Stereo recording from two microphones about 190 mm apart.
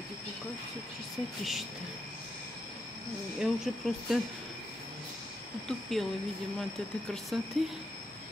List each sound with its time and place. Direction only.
1.4 s speech: centre (ahead or behind)
3.3 s speech: centre (ahead or behind)
5.7 s speech: centre (ahead or behind)
7.6 s speech: centre (ahead or behind)